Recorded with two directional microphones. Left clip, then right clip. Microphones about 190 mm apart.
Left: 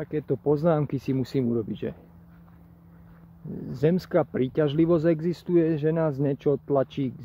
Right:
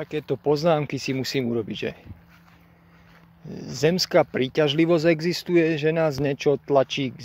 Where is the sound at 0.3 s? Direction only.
20° right (ahead or behind).